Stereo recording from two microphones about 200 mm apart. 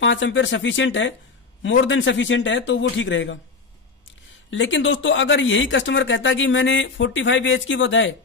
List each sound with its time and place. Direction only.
0.0 s speech: 70° left (ahead or behind)
4.5 s speech: 70° left (ahead or behind)